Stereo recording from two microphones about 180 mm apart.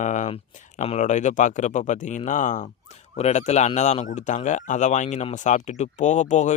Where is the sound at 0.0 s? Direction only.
45° left (ahead or behind).